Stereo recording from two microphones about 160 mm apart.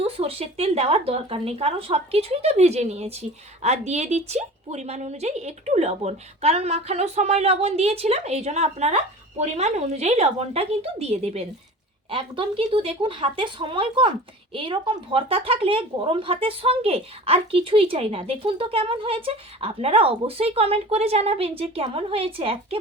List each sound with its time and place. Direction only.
0.0 s a woman's voice: 35° right (ahead or behind)